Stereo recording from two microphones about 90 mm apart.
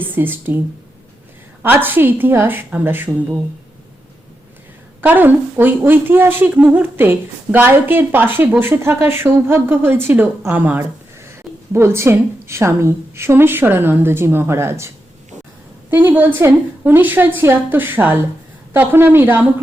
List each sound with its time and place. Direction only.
0.0 s a woman's voice: 20° right (ahead or behind)
1.6 s a woman's voice: 20° right (ahead or behind)
4.9 s a woman's voice: 20° right (ahead or behind)